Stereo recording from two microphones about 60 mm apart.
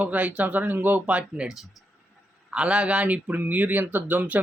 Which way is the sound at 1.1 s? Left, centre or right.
Centre.